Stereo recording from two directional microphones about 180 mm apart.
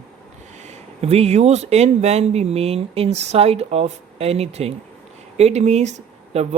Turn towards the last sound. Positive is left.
turn(degrees=-35)  # may be behind; listen again after turning